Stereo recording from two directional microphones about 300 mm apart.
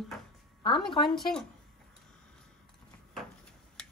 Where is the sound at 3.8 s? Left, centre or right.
Centre.